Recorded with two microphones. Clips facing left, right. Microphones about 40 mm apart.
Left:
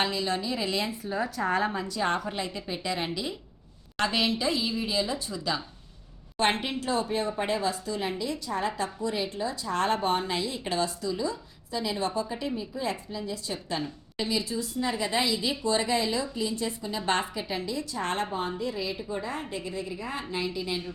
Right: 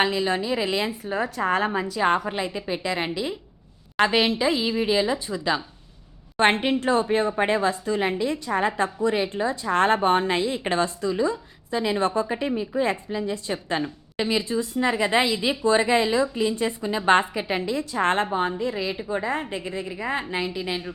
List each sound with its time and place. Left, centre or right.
0.0 s a woman's voice: right